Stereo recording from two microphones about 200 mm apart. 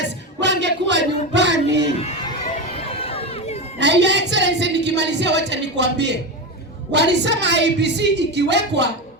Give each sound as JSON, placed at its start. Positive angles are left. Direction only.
{"t": 0.0, "sound": "a sound", "side_deg": -60}
{"t": 2.7, "sound": "crowd", "side_deg": 30}
{"t": 3.8, "sound": "a woman's voice", "side_deg": -60}